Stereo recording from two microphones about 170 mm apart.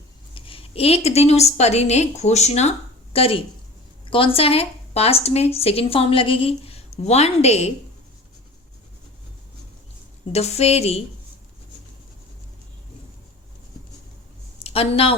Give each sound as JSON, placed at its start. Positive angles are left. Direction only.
{"t": 0.3, "sound": "a woman's voice", "side_deg": 30}
{"t": 10.3, "sound": "speech", "side_deg": 40}
{"t": 14.6, "sound": "a sound", "side_deg": 35}